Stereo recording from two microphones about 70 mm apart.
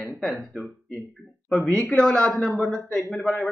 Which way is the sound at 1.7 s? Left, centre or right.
Centre.